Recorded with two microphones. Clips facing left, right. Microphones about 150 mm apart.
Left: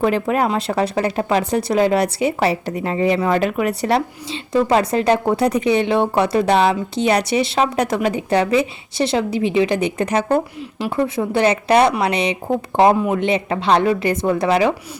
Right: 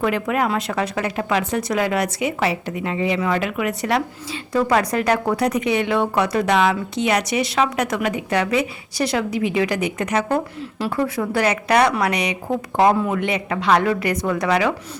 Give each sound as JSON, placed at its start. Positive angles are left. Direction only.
{"t": 0.0, "sound": "speech", "side_deg": 30}